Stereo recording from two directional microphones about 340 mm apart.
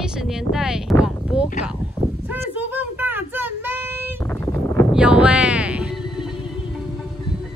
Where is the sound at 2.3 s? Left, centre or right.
Centre.